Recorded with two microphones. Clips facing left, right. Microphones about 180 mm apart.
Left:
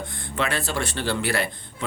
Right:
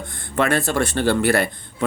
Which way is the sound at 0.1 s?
50° right (ahead or behind).